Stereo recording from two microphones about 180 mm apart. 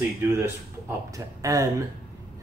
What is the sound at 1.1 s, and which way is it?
Speech, 20° right (ahead or behind).